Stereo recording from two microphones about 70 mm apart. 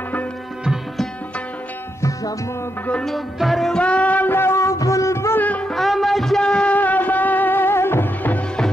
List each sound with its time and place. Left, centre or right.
2.0 s music: left
3.1 s music: centre
3.7 s music: centre
4.4 s music: left
5.4 s music: left
5.7 s music: centre; by 8.4 s left